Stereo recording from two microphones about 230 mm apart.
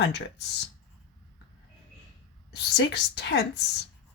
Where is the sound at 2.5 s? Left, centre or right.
Left.